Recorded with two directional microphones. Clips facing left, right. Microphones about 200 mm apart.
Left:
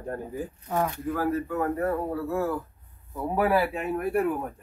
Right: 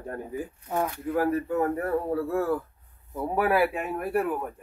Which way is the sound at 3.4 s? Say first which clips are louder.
Even; 10° right (ahead or behind).